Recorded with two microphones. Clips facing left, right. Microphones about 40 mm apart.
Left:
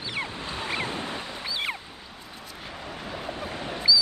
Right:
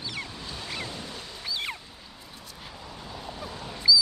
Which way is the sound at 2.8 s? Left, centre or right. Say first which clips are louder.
Left 6 dB; left.